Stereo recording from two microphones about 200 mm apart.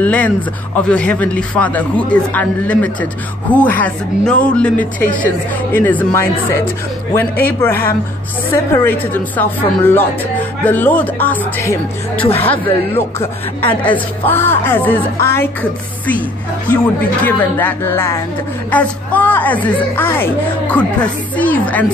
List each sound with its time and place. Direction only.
0.0 s a sound: 5° left (ahead or behind)
0.8 s a woman's voice: 5° left (ahead or behind)
5.0 s a woman's voice: 45° left (ahead or behind)
5.7 s a woman's voice: 10° left (ahead or behind)
16.6 s a woman's voice: 5° left (ahead or behind)